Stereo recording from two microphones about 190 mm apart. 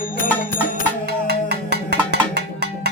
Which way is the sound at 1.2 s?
60° right (ahead or behind).